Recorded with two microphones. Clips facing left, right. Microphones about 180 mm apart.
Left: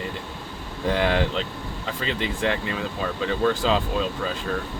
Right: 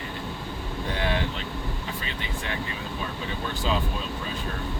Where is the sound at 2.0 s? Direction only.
90° left.